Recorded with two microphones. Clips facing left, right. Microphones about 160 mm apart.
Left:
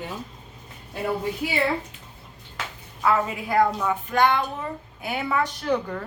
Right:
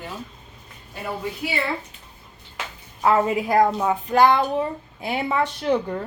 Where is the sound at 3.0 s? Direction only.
35° right (ahead or behind).